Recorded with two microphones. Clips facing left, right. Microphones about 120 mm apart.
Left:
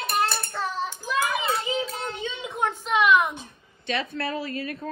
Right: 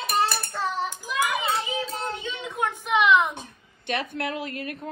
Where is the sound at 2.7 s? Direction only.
15° right (ahead or behind).